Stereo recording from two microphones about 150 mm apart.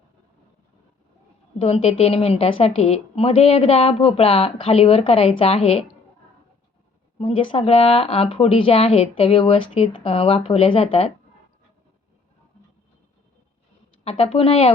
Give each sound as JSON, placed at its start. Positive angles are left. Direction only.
{"t": 1.5, "sound": "a woman's voice", "side_deg": 40}
{"t": 7.2, "sound": "a woman's voice", "side_deg": 40}
{"t": 14.0, "sound": "a woman's voice", "side_deg": 40}